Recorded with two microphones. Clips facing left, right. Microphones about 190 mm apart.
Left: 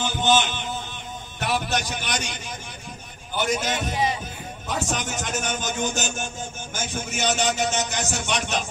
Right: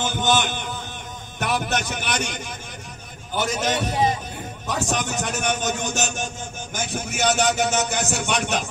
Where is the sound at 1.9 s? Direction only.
55° right (ahead or behind).